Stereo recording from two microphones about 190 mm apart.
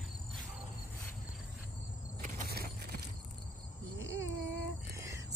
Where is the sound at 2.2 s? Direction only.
50° right (ahead or behind).